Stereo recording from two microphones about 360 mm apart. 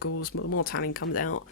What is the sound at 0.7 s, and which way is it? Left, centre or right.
Speech, left.